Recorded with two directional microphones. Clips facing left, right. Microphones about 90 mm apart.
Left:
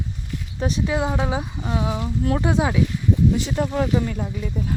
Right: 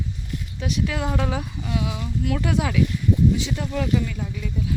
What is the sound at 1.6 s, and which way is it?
Speech, 35° left (ahead or behind).